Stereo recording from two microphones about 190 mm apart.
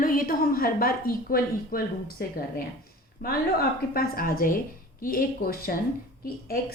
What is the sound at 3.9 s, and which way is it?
A woman's voice, 50° left (ahead or behind).